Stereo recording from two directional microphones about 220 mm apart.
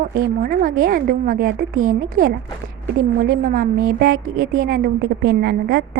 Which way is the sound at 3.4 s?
40° right (ahead or behind).